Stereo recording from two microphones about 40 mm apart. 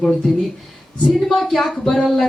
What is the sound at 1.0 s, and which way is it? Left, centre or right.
Speech, centre.